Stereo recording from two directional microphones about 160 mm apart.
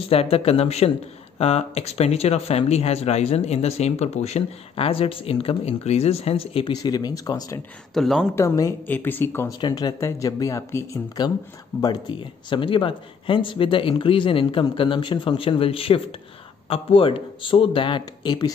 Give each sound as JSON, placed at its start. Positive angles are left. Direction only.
{"t": 0.0, "sound": "speech", "side_deg": 35}
{"t": 7.9, "sound": "speech", "side_deg": 0}
{"t": 8.4, "sound": "speech", "side_deg": 20}
{"t": 9.6, "sound": "speech", "side_deg": 25}